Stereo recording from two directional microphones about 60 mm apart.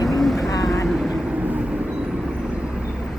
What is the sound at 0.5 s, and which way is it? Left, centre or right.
Vehicle, left.